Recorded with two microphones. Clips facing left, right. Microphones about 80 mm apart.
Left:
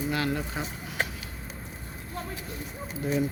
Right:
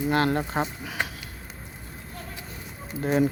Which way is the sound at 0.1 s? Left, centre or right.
Right.